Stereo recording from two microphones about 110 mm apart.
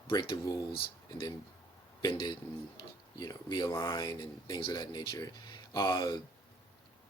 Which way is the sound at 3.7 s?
25° left (ahead or behind).